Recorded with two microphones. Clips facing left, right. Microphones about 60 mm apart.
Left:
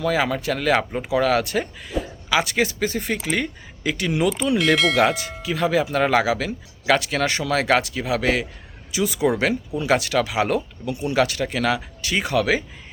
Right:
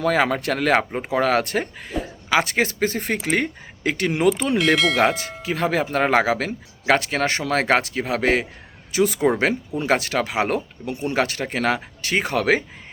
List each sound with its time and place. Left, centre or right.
0.0 s speech: right
4.5 s speech: centre
5.0 s speech: right